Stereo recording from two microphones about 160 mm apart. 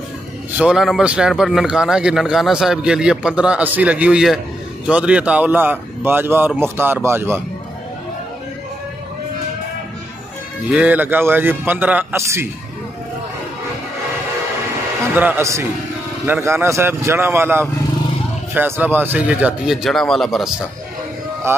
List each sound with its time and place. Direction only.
0.5 s a man's voice: 5° right (ahead or behind)
10.7 s a man's voice: 10° right (ahead or behind)
15.1 s a man's voice: 10° right (ahead or behind)
21.5 s a man's voice: 15° right (ahead or behind)